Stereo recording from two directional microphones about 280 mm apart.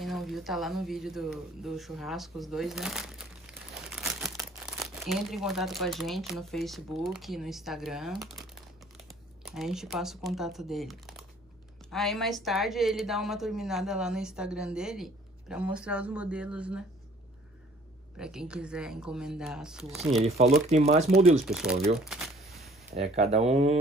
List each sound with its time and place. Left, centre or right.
0.0 s speech: centre
3.7 s crumpling: centre
5.9 s speech: centre
9.5 s speech: centre
18.1 s speech: centre
20.2 s speech: right
21.5 s speech: centre
22.0 s shuffling cards: centre
22.9 s speech: right